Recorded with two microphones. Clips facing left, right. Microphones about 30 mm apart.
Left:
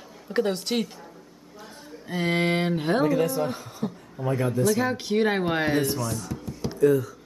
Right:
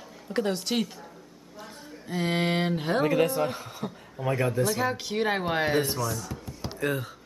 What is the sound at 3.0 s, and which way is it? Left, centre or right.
Speech, right.